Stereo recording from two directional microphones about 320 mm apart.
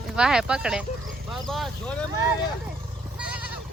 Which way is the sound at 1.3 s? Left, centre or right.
Centre.